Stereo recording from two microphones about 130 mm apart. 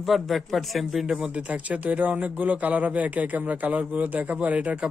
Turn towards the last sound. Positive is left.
turn(degrees=-10)  # may be behind; listen again after turning